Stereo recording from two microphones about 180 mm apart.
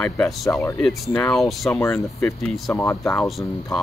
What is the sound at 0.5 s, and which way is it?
Speech, 15° left (ahead or behind).